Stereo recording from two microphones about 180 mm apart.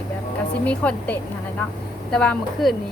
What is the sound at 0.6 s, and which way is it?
A woman's voice, 5° left (ahead or behind).